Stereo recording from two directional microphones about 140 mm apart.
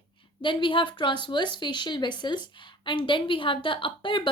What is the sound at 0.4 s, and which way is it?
A woman's voice, 35° left (ahead or behind).